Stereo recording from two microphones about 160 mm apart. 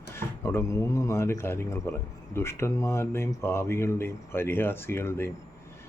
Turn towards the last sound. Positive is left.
turn(degrees=15)  # may be behind; listen again after turning